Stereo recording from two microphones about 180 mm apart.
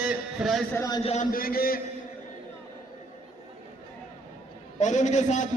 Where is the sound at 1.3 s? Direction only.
55° left (ahead or behind).